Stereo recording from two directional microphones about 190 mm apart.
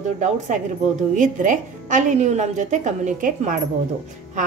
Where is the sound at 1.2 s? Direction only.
40° right (ahead or behind).